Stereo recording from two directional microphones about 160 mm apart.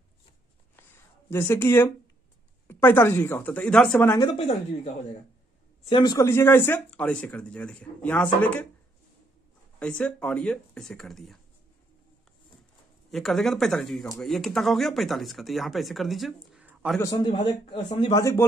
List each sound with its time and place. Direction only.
1.3 s speech: 15° left (ahead or behind)
4.3 s a man's voice: 40° left (ahead or behind)
6.1 s speech: 15° left (ahead or behind)
9.8 s speech: 5° left (ahead or behind)
13.1 s speech: centre (ahead or behind)
17.0 s a man's voice: 25° left (ahead or behind)
18.1 s speech: 20° left (ahead or behind)